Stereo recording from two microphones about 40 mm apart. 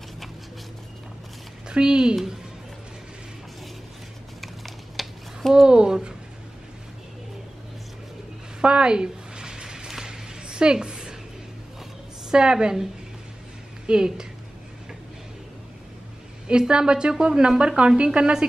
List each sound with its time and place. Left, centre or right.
1.7 s a woman's voice: right
4.4 s a sound: centre
5.7 s a woman's voice: centre
8.6 s a sound: right
12.3 s a woman's voice: centre
13.8 s a woman's voice: centre
16.4 s a woman's voice: right